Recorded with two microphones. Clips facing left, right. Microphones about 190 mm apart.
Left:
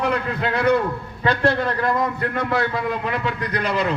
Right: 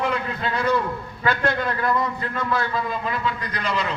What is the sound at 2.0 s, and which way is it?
A man's voice, 55° left (ahead or behind).